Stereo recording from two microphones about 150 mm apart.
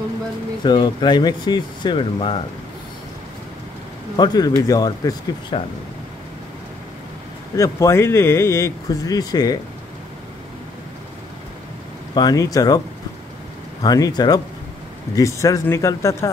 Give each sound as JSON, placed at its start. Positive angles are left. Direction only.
{"t": 0.7, "sound": "speech", "side_deg": 30}
{"t": 4.2, "sound": "speech", "side_deg": 25}
{"t": 5.5, "sound": "speech", "side_deg": 35}
{"t": 7.5, "sound": "speech", "side_deg": 20}
{"t": 12.1, "sound": "speech", "side_deg": 30}
{"t": 13.8, "sound": "speech", "side_deg": 25}